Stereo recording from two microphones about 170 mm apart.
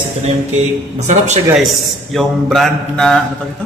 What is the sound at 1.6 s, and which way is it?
A man's voice, centre (ahead or behind).